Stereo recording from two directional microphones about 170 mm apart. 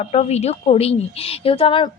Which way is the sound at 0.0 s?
40° left (ahead or behind).